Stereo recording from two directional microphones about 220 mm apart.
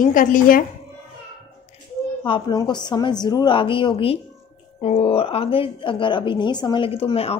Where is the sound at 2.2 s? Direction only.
20° left (ahead or behind).